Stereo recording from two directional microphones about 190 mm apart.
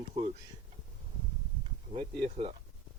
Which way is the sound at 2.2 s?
30° right (ahead or behind).